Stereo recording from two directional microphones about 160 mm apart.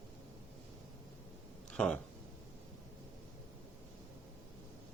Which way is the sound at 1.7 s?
5° left (ahead or behind).